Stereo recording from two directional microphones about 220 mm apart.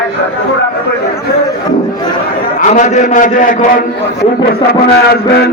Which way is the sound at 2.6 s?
35° left (ahead or behind).